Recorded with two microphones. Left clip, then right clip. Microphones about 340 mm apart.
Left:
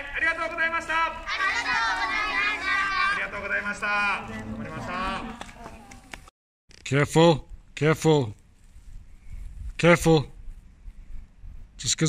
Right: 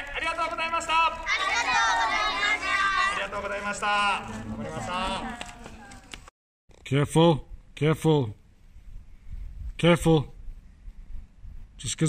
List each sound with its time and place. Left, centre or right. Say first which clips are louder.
0.1 s a sound: left 3 dB; centre
1.2 s a sound: right 1 dB; centre
3.1 s a man's voice: left 2 dB; centre
6.8 s speech: left 2 dB; centre
9.8 s speech: left 3 dB; centre
11.8 s speech: left 4 dB; centre